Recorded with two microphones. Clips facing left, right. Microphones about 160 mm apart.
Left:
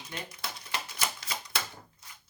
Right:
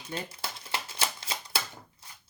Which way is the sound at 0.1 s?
30° right (ahead or behind).